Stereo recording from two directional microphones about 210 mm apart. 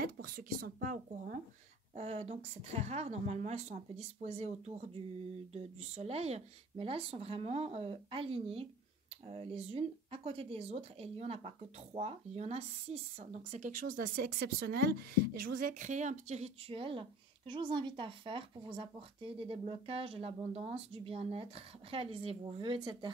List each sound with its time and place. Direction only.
0.0 s a woman's voice: 45° right (ahead or behind); by 23.1 s 20° right (ahead or behind)